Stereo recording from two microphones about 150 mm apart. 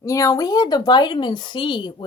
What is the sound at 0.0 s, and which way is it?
A woman's voice, 20° left (ahead or behind).